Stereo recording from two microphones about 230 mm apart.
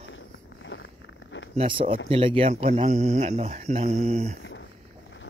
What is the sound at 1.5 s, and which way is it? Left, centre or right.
Speech, right.